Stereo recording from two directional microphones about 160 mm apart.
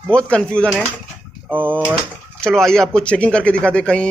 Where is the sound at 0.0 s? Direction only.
5° left (ahead or behind).